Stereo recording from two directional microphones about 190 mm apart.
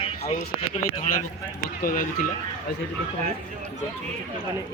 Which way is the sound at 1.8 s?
50° left (ahead or behind).